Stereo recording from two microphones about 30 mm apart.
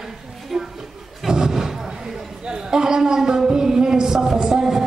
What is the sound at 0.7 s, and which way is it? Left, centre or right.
Slam, centre.